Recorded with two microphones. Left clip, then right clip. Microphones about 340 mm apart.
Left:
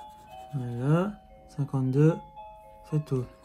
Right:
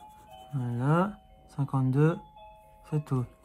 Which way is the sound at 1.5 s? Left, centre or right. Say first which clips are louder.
Left 1 dB; centre.